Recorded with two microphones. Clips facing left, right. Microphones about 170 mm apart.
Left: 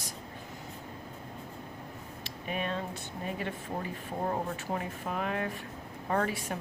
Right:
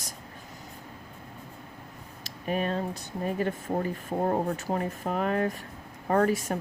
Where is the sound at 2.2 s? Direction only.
40° right (ahead or behind).